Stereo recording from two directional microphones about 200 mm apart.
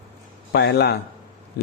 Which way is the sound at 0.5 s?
55° left (ahead or behind).